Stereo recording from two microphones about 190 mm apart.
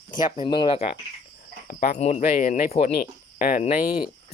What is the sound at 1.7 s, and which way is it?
Speech, 50° left (ahead or behind).